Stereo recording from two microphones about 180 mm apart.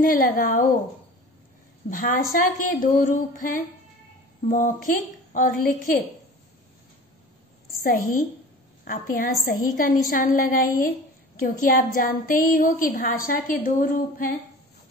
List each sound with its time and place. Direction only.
0.0 s a woman's voice: 50° left (ahead or behind)
1.9 s a woman's voice: 50° left (ahead or behind)
7.8 s a woman's voice: 50° left (ahead or behind)